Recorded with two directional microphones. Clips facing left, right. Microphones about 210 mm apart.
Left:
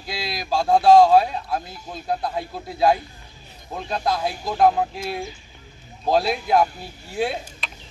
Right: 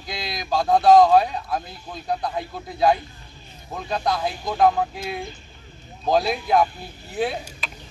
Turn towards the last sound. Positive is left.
turn(degrees=0)  # may be behind; listen again after turning